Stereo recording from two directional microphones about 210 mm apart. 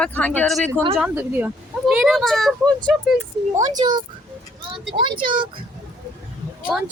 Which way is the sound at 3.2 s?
15° right (ahead or behind).